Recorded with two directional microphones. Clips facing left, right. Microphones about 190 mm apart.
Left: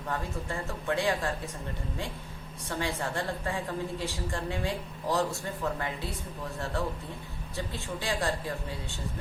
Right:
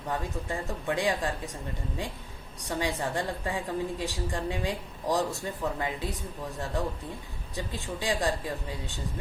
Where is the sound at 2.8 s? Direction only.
15° right (ahead or behind).